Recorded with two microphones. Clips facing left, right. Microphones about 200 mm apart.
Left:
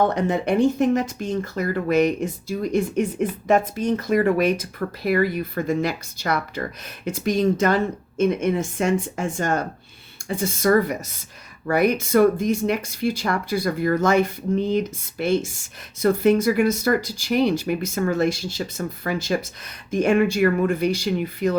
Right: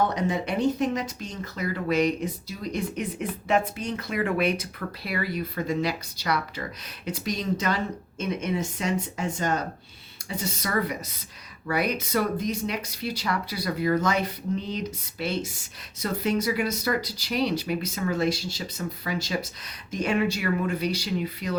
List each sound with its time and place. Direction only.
0.0 s speech: 55° left (ahead or behind)